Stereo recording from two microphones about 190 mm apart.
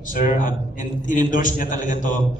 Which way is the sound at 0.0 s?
45° left (ahead or behind).